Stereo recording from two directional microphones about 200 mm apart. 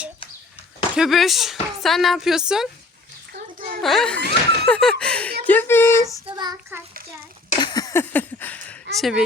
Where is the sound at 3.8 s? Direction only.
Centre (ahead or behind).